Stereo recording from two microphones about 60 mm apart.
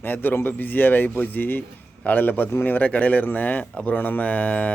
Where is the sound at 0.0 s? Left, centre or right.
Left.